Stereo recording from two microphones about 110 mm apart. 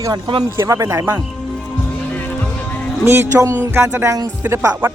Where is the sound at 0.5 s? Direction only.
25° right (ahead or behind).